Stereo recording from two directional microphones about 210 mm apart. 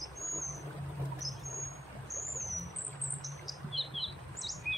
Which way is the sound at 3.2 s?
Centre (ahead or behind).